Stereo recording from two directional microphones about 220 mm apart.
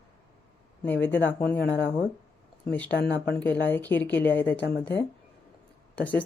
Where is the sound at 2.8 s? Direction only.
50° left (ahead or behind).